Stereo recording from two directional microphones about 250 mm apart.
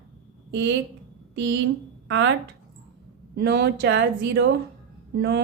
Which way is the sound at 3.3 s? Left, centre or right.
Right.